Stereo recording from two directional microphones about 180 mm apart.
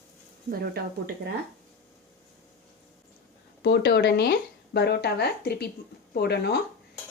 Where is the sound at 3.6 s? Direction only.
70° left (ahead or behind).